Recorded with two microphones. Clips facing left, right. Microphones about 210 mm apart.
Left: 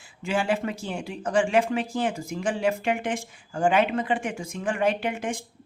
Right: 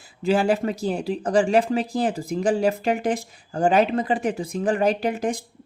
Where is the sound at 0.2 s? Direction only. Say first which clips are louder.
Right 5 dB; 35° right (ahead or behind).